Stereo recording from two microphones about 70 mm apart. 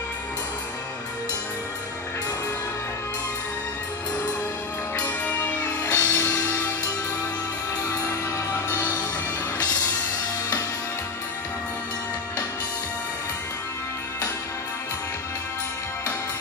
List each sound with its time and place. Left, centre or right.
4.9 s music: left
5.9 s music: left
8.1 s music: left